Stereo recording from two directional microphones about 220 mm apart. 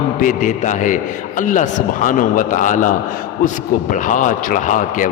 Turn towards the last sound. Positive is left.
turn(degrees=35)  # may be behind; listen again after turning